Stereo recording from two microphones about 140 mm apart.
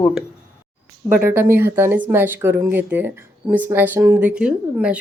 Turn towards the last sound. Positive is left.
turn(degrees=-10)  # may be behind; listen again after turning